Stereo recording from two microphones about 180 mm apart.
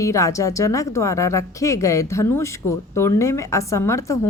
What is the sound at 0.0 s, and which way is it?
A woman's voice, 15° left (ahead or behind).